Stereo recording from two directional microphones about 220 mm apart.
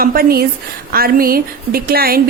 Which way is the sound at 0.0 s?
40° right (ahead or behind).